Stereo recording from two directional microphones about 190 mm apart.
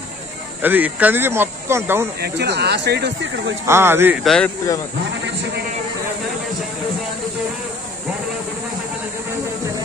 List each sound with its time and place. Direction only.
0.6 s speech: 10° right (ahead or behind)
2.1 s speech: 60° right (ahead or behind)
3.6 s speech: 15° right (ahead or behind)
4.2 s speech: centre (ahead or behind)